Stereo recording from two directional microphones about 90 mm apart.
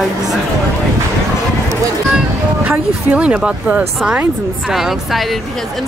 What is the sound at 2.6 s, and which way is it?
Speech, 15° right (ahead or behind).